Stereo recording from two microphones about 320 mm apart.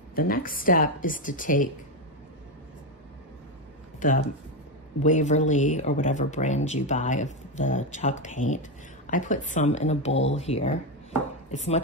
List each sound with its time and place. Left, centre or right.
0.1 s speech: left
4.0 s speech: left